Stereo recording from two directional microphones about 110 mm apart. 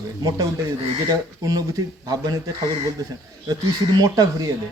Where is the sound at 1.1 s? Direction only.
35° right (ahead or behind).